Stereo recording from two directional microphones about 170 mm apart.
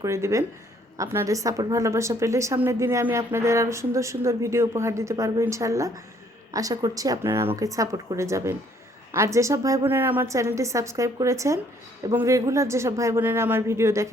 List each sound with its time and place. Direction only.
0.0 s a woman's voice: 15° right (ahead or behind)